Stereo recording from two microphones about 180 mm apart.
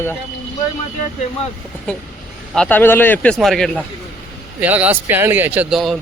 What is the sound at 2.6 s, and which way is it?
Speech, 10° left (ahead or behind).